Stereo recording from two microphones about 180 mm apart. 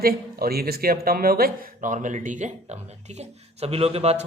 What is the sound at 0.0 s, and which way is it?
Speech, 55° right (ahead or behind).